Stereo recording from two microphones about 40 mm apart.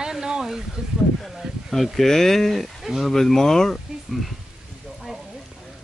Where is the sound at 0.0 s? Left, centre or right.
Centre.